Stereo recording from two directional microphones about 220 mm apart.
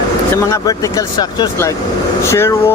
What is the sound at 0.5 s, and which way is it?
Speech, 15° left (ahead or behind).